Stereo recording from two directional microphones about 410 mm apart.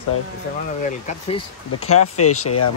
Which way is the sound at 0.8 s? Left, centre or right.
Centre.